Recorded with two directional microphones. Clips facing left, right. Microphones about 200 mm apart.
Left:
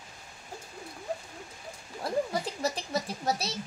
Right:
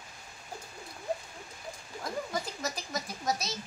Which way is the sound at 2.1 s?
30° left (ahead or behind).